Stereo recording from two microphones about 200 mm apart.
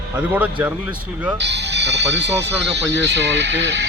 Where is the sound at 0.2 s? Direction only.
10° right (ahead or behind).